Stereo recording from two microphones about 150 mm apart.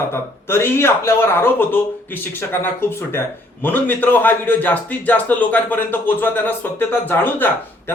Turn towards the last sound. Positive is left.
turn(degrees=15)  # may be behind; listen again after turning